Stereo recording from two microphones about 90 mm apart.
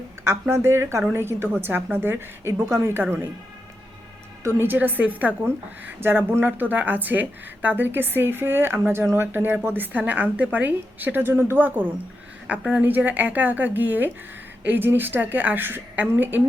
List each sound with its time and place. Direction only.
0.3 s speech: 30° right (ahead or behind)
4.4 s speech: 25° right (ahead or behind)